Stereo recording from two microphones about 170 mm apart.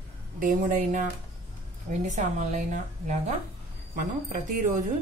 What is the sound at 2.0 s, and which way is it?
Speech, 45° right (ahead or behind).